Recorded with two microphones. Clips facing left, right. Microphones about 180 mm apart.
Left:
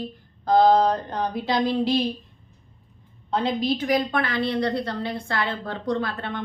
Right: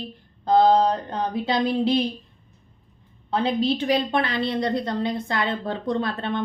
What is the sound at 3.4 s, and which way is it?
A woman's voice, 30° right (ahead or behind).